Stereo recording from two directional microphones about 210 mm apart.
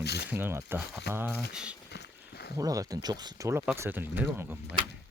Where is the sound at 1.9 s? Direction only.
50° left (ahead or behind).